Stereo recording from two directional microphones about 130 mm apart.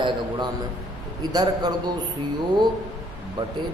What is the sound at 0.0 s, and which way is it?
A man's voice, 35° right (ahead or behind).